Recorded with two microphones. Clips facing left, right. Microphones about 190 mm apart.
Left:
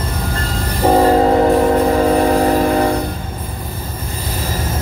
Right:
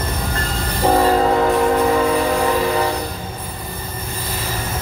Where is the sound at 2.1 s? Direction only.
45° left (ahead or behind).